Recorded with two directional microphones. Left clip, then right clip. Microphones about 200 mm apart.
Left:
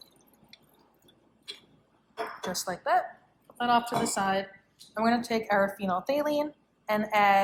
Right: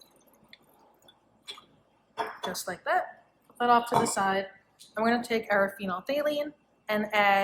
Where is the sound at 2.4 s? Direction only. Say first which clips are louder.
Left 1 dB; 30° left (ahead or behind).